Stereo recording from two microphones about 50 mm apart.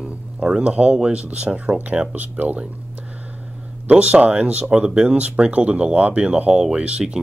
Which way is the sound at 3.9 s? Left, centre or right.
Right.